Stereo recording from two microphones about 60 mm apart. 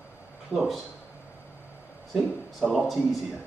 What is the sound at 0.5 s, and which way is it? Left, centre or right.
Speech, centre.